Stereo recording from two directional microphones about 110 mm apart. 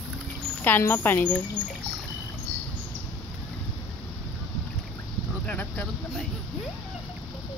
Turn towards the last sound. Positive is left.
turn(degrees=10)  # may be behind; listen again after turning